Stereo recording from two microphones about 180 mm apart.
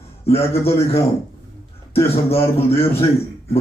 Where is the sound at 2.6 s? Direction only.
35° left (ahead or behind).